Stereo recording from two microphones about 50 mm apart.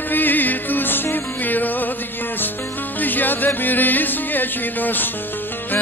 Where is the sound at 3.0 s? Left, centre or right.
Left.